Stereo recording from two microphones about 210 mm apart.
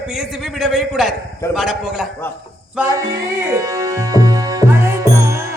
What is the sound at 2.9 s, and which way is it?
Music, 15° right (ahead or behind).